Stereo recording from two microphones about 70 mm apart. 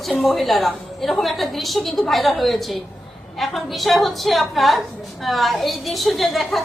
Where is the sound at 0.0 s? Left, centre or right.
Centre.